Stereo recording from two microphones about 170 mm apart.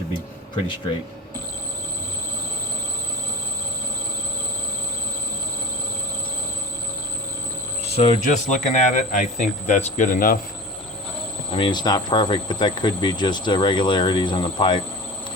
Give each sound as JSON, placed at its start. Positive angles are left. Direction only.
{"t": 7.9, "sound": "speech", "side_deg": 35}
{"t": 11.5, "sound": "speech", "side_deg": 30}